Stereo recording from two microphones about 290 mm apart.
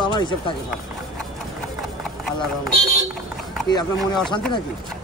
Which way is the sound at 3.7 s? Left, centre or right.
Centre.